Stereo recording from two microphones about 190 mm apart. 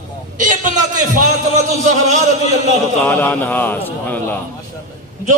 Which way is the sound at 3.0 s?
10° left (ahead or behind).